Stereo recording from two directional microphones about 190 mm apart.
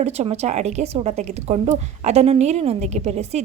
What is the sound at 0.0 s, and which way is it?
A woman's voice, 35° right (ahead or behind).